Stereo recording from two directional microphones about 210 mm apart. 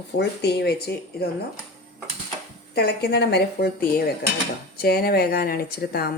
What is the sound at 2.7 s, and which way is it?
A woman's voice, 50° left (ahead or behind).